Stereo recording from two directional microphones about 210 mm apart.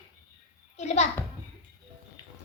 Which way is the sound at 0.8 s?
30° left (ahead or behind).